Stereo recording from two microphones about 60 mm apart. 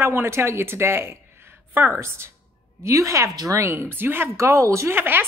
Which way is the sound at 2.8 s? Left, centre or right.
Right.